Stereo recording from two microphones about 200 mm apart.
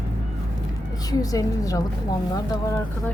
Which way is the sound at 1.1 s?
15° left (ahead or behind).